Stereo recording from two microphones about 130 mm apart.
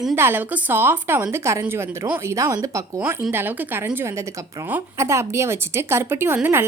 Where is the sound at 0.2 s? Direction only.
15° right (ahead or behind).